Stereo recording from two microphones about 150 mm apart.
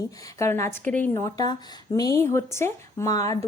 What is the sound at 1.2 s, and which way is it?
A woman's voice, 25° left (ahead or behind).